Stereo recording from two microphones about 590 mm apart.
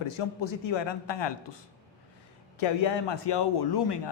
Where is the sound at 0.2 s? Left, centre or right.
Left.